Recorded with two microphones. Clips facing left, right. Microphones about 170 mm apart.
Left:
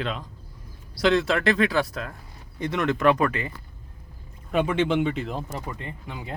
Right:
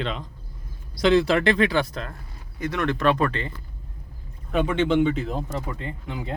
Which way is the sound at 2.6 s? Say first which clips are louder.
Left 1 dB; 20° left (ahead or behind).